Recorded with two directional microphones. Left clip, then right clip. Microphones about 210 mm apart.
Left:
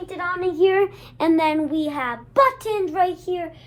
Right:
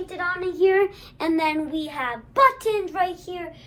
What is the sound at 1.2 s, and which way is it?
Child singing, 45° left (ahead or behind).